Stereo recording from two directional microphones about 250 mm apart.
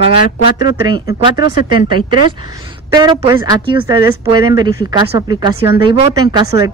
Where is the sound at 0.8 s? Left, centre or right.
Centre.